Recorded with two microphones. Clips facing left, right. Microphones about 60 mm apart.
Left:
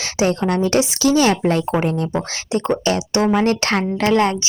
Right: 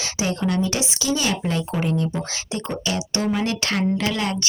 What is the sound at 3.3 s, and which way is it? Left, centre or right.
Speech, left.